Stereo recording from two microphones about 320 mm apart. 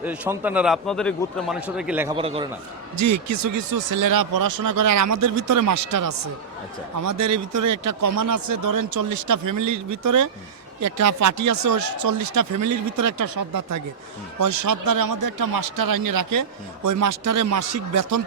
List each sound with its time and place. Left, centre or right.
0.0 s a man's voice: centre
3.0 s speech: right
7.2 s speech: right